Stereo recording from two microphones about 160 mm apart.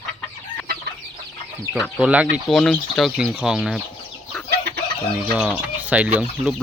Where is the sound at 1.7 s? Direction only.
5° left (ahead or behind).